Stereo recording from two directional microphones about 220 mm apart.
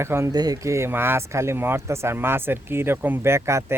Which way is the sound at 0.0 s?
10° right (ahead or behind).